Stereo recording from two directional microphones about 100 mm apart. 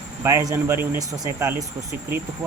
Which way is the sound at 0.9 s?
35° right (ahead or behind).